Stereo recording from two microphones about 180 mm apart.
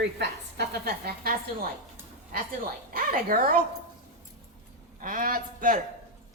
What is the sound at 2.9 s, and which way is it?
Speech, 50° right (ahead or behind).